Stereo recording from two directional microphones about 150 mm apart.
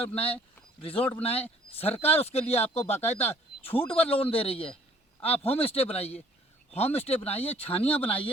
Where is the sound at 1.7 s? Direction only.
40° left (ahead or behind).